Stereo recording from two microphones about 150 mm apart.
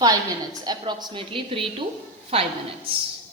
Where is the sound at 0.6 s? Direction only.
25° right (ahead or behind).